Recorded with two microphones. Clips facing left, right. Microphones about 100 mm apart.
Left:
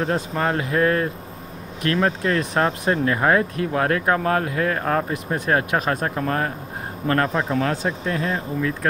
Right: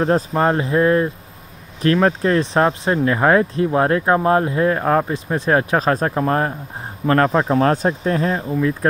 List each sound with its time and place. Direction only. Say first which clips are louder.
0.0 s speech: right 6 dB; 30° right (ahead or behind)
1.8 s speech: right 5 dB; 35° right (ahead or behind)